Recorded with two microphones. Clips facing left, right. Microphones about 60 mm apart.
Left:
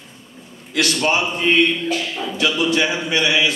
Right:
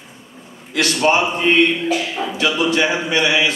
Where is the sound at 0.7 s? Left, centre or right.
Centre.